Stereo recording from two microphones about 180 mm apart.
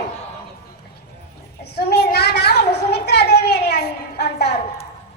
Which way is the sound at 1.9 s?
65° left (ahead or behind).